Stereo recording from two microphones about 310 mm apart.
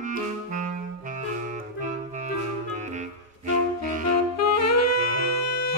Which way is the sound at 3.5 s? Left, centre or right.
Right.